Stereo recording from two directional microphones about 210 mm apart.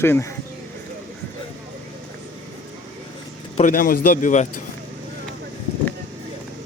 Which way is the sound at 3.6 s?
40° left (ahead or behind).